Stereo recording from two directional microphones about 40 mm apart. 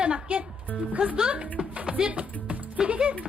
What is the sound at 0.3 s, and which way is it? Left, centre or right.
Music, right.